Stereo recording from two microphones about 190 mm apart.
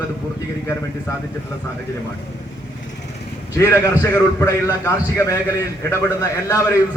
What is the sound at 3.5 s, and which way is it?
A man's voice, 15° left (ahead or behind).